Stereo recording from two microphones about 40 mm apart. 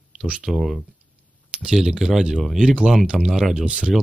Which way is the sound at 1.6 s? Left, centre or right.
Centre.